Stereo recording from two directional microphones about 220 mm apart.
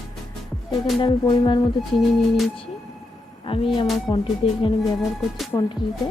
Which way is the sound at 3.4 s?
25° left (ahead or behind).